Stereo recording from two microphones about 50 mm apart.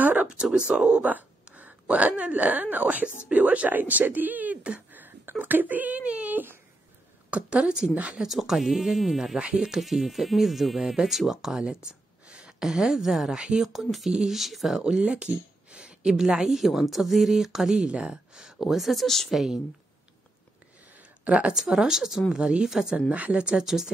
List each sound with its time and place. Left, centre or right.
0.0 s a sound: right
0.3 s speech: centre
1.0 s speech: right
4.9 s a sound: right
5.4 s speech: right
7.2 s a woman's voice: right
8.2 s a woman's voice: centre
13.8 s speech: centre
14.8 s speech: centre
19.3 s speech: centre
21.2 s a woman's voice: right
21.5 s speech: centre
22.9 s a woman's voice: right
23.4 s speech: centre